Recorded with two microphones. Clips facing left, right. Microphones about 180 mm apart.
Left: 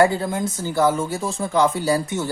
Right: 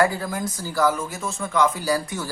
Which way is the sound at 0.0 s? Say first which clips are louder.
Left 4 dB; 25° left (ahead or behind).